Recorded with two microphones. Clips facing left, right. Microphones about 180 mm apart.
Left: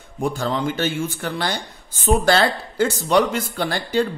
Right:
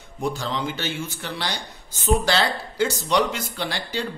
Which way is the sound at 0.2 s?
50° left (ahead or behind).